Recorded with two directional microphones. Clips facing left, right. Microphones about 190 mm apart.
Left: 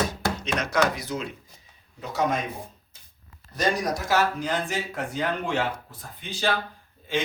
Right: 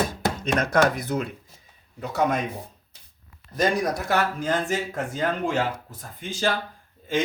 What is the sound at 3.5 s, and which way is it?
Speech, 55° right (ahead or behind).